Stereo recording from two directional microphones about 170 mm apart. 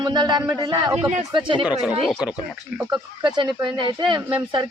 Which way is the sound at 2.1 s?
5° right (ahead or behind).